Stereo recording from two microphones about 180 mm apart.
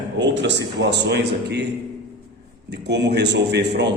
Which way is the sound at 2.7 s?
70° right (ahead or behind).